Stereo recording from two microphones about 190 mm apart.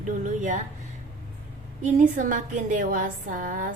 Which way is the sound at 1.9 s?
40° right (ahead or behind).